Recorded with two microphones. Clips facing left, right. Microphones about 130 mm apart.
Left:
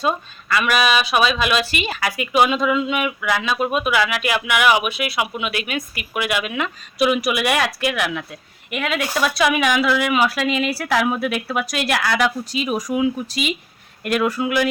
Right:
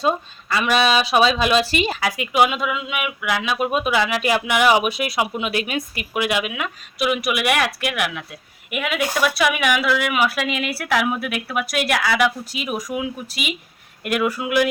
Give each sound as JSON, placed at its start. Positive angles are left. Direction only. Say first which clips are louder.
{"t": 0.0, "sound": "speech", "louder": "right 1 dB", "side_deg": -25}
{"t": 2.4, "sound": "speech", "louder": "left 2 dB", "side_deg": -10}
{"t": 7.1, "sound": "speech", "louder": "right 2 dB", "side_deg": -5}